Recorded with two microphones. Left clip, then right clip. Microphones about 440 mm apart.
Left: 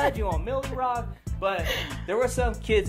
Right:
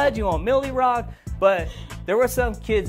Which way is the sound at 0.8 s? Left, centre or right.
Right.